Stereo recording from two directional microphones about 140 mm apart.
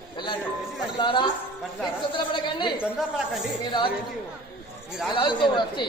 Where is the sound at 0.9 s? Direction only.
35° left (ahead or behind).